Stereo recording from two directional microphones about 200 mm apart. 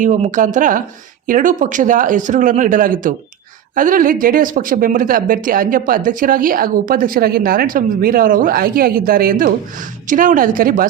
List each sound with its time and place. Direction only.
0.0 s speech: 40° right (ahead or behind)